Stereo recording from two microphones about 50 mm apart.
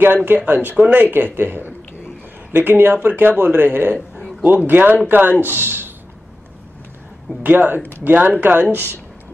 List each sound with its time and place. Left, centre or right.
0.0 s speech: right
7.4 s speech: right